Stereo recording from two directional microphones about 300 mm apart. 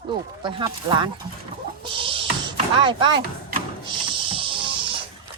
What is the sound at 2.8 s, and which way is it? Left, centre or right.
Speech, centre.